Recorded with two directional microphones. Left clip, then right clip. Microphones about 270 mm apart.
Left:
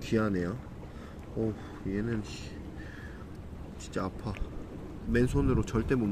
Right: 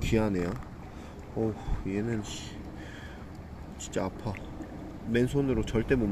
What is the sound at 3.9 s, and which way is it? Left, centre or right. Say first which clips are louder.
Speech: right 3 dB; centre.